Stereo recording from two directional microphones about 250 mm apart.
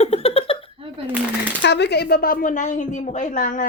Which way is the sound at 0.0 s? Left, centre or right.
Left.